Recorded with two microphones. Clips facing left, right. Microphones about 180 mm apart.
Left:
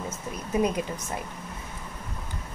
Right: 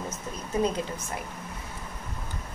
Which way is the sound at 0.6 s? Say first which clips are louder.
Left 1 dB; 15° left (ahead or behind).